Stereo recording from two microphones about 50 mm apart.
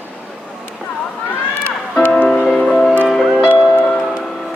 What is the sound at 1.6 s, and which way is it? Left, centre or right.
Music, left.